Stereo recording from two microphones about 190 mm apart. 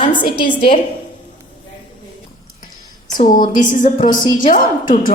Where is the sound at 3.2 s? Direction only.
45° left (ahead or behind).